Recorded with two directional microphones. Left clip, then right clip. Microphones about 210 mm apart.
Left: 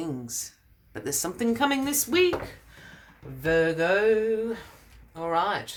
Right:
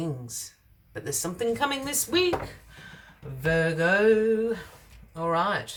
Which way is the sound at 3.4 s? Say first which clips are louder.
Left 2 dB; 25° left (ahead or behind).